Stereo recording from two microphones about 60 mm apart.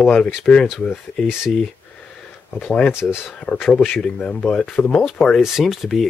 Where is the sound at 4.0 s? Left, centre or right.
Centre.